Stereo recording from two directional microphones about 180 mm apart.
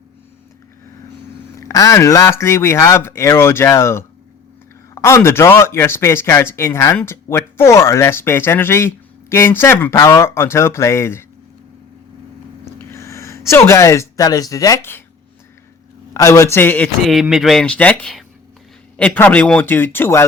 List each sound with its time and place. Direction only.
1.5 s speech: 20° left (ahead or behind)
12.6 s a sound: 15° left (ahead or behind)
16.1 s speech: 15° left (ahead or behind)